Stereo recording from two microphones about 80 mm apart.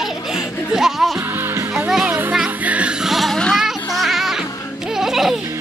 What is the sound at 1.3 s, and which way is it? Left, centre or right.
Music, right.